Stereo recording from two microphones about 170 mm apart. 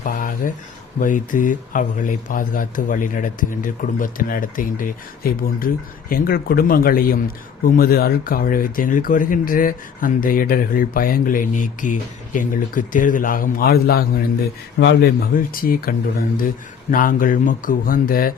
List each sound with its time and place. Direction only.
0.0 s a sound: 50° left (ahead or behind)
0.9 s speech: 50° left (ahead or behind)
14.8 s speech: 90° left
15.3 s speech: 55° left (ahead or behind)